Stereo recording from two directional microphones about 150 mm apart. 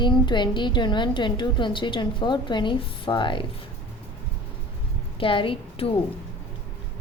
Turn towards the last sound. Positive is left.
turn(degrees=40)  # may be behind; listen again after turning